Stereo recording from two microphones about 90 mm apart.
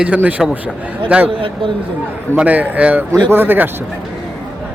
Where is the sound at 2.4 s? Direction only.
15° right (ahead or behind).